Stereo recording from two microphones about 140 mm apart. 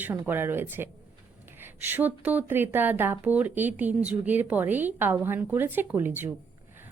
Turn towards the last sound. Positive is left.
turn(degrees=-15)  # may be behind; listen again after turning